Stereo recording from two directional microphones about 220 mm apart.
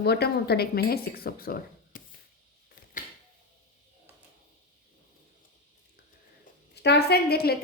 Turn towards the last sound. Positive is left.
turn(degrees=45)  # may be behind; listen again after turning